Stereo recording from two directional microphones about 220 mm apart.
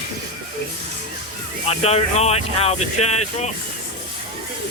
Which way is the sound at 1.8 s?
30° left (ahead or behind).